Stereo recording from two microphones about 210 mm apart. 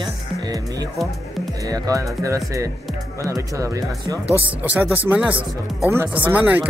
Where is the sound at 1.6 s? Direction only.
15° right (ahead or behind).